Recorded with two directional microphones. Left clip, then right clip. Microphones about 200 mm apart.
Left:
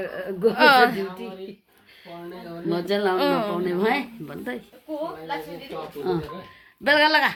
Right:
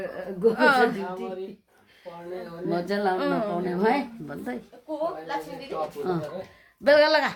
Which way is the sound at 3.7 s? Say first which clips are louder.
Right 1 dB; 10° right (ahead or behind).